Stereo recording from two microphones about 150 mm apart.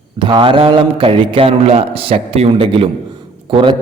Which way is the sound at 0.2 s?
35° right (ahead or behind).